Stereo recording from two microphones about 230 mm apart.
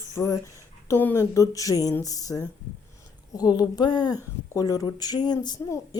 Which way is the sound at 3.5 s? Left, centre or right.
Centre.